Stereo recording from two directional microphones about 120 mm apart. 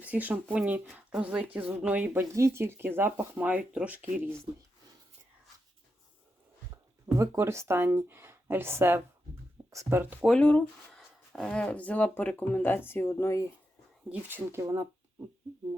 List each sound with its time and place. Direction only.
0.0 s speech: 15° right (ahead or behind)
7.2 s speech: 20° right (ahead or behind)
10.2 s speech: 10° left (ahead or behind); by 13.5 s 25° left (ahead or behind)
14.1 s speech: 15° right (ahead or behind)